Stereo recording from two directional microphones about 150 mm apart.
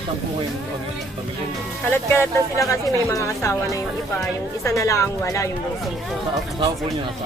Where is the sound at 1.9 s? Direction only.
15° left (ahead or behind).